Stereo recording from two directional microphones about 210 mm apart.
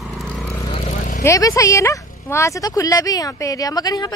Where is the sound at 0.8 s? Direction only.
35° left (ahead or behind).